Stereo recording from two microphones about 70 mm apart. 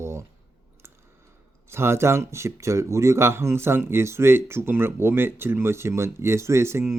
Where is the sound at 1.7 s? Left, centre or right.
Right.